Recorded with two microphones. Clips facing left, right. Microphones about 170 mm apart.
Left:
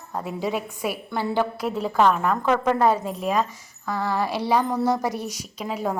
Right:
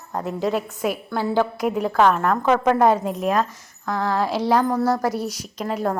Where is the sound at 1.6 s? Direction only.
10° right (ahead or behind).